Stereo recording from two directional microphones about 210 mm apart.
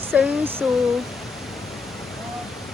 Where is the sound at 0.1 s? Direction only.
Centre (ahead or behind).